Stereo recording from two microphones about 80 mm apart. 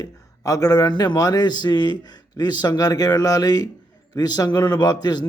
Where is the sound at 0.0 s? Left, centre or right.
Left.